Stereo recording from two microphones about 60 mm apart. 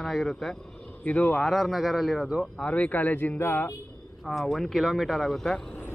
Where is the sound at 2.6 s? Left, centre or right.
Left.